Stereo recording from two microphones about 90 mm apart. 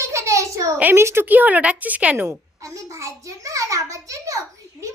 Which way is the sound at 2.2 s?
35° right (ahead or behind).